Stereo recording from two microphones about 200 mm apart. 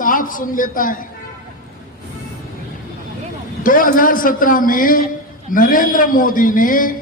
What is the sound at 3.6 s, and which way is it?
A man's voice, 45° left (ahead or behind).